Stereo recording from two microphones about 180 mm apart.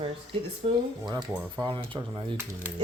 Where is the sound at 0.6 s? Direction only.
35° right (ahead or behind).